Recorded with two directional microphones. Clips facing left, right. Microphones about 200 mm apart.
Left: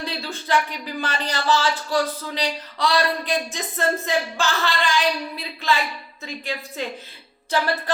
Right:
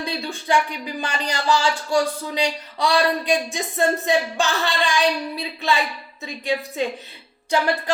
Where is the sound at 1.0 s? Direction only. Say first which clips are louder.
Right 1 dB; 15° right (ahead or behind).